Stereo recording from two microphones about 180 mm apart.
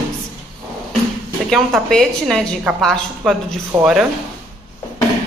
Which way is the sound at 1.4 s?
Centre (ahead or behind).